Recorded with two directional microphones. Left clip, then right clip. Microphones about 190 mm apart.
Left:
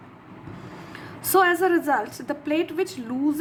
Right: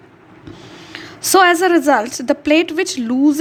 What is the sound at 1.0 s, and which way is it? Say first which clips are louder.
A woman's voice: right 8 dB; 35° right (ahead or behind).